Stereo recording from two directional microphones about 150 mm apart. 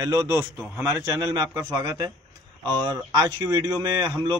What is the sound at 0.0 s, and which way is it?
A man's voice, 20° right (ahead or behind).